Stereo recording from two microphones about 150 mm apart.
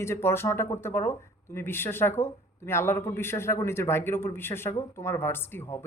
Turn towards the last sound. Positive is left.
turn(degrees=15)  # may be behind; listen again after turning